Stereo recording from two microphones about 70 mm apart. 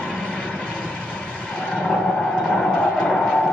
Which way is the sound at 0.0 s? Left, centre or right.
Centre.